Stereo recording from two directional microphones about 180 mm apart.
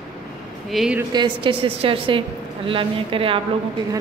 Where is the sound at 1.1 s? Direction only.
25° right (ahead or behind).